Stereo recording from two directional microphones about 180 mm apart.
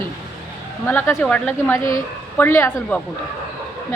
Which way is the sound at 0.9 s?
10° left (ahead or behind).